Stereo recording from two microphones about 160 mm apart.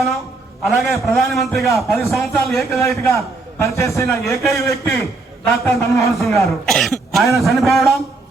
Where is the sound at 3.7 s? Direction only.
20° left (ahead or behind).